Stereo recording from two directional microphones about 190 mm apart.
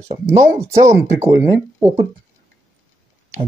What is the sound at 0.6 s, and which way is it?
Speech, 15° right (ahead or behind).